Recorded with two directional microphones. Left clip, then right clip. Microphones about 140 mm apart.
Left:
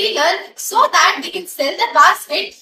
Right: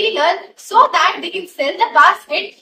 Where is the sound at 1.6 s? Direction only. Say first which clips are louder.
Even; 20° right (ahead or behind).